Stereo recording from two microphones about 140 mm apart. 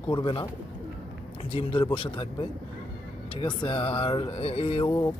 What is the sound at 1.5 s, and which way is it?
Speech, 40° left (ahead or behind).